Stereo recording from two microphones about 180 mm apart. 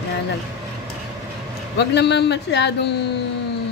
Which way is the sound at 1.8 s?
70° left (ahead or behind).